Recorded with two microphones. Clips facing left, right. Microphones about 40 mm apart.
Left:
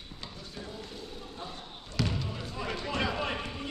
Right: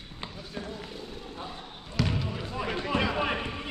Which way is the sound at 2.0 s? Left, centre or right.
Centre.